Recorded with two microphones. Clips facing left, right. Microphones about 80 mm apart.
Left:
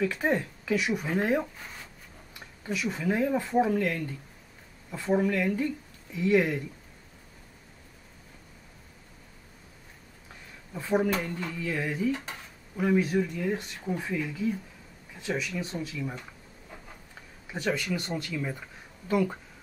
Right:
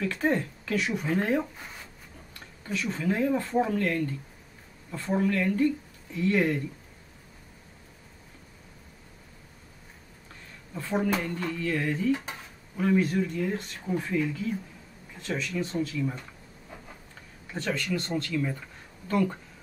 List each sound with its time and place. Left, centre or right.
0.0 s speech: centre
2.6 s speech: centre
10.7 s speech: centre
17.5 s speech: centre